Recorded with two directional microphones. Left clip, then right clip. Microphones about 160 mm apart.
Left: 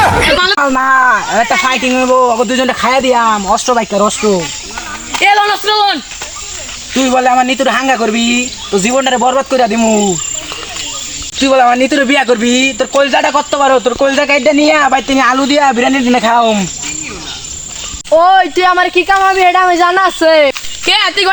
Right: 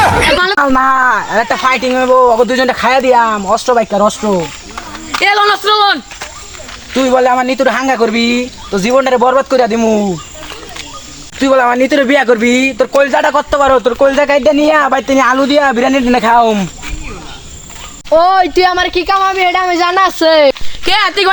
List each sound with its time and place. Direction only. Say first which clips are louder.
0.0 s a sound: even; centre (ahead or behind)
0.4 s a sound: even; 20° right (ahead or behind)
1.0 s speech: left 1 dB; 30° right (ahead or behind)
5.1 s a man's voice: even; centre (ahead or behind)
7.1 s speech: left 1 dB; 25° right (ahead or behind)
11.4 s speech: left 1 dB; 20° right (ahead or behind)
13.0 s speech: left 1 dB; 25° right (ahead or behind)
15.8 s speech: even; 45° right (ahead or behind)
18.1 s speech: left 1 dB; 40° right (ahead or behind); by 20.5 s 55° right (ahead or behind)
20.8 s speech: left 1 dB; 30° right (ahead or behind)